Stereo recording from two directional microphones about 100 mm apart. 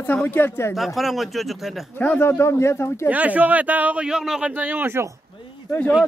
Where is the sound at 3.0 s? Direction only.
15° right (ahead or behind).